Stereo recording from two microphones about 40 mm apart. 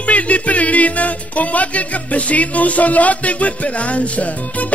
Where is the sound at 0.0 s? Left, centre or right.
Left.